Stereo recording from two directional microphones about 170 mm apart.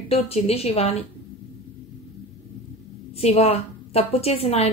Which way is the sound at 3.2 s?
35° left (ahead or behind).